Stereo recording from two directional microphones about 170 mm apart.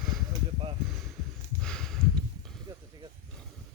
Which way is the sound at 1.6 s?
5° left (ahead or behind).